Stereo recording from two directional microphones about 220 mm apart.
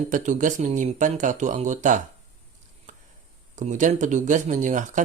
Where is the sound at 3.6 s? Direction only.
35° right (ahead or behind).